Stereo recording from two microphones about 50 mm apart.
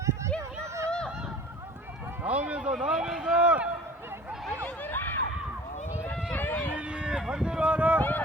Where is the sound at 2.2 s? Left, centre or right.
Right.